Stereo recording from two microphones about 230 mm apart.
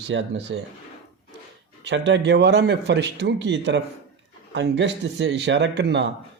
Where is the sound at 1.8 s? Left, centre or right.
Right.